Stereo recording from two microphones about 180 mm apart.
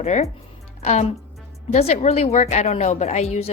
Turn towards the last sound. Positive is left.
turn(degrees=40)  # may be behind; listen again after turning